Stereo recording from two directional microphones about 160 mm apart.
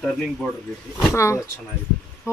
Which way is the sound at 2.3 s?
15° left (ahead or behind).